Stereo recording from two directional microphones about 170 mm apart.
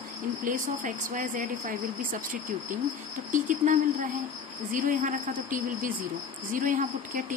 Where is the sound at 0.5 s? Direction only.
50° right (ahead or behind).